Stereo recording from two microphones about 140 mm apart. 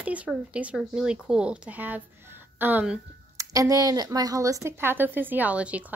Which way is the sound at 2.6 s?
10° right (ahead or behind).